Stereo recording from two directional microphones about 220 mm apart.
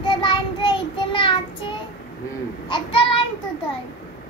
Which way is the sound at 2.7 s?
25° left (ahead or behind).